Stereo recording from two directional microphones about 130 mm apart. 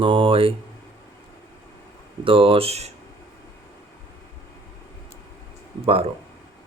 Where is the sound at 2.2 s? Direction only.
45° right (ahead or behind).